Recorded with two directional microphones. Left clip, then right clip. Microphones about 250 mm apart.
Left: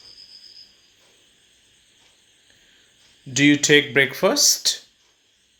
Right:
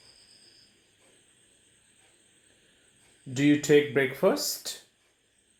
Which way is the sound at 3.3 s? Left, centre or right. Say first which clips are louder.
Left 6 dB; left.